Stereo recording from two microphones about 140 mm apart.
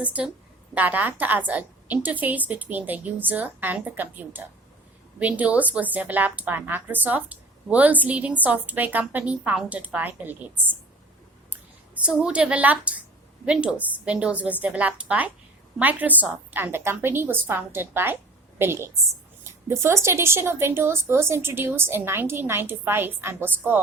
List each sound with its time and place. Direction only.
0.0 s a woman's voice: 10° right (ahead or behind)
12.0 s a woman's voice: 5° right (ahead or behind)